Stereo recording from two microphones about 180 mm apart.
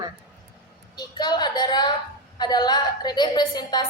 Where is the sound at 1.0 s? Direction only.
25° left (ahead or behind).